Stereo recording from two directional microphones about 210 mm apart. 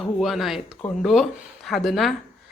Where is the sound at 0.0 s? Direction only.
Centre (ahead or behind).